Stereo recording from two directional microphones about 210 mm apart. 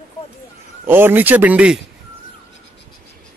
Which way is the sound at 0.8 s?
10° right (ahead or behind).